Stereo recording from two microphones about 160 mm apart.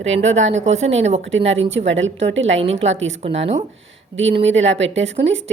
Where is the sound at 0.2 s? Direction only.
45° right (ahead or behind).